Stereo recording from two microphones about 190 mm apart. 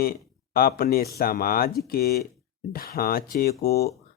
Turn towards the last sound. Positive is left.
turn(degrees=55)  # may be behind; listen again after turning